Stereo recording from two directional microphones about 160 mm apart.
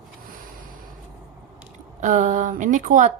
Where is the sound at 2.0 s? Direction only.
50° right (ahead or behind).